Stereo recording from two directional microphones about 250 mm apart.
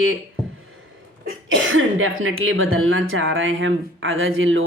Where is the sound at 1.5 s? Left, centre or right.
Right.